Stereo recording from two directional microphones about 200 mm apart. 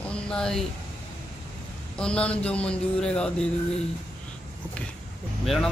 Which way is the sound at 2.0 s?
5° left (ahead or behind).